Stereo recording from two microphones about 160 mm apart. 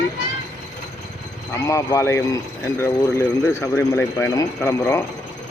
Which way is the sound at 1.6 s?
20° left (ahead or behind).